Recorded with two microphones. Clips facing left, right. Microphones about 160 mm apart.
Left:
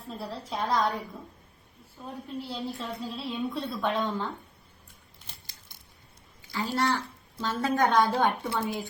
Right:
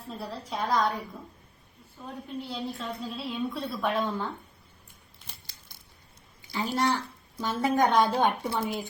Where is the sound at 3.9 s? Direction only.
20° left (ahead or behind).